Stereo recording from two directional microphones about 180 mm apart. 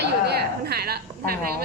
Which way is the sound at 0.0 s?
60° right (ahead or behind).